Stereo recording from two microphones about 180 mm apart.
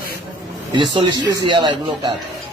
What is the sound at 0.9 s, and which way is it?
A woman's voice, 25° right (ahead or behind).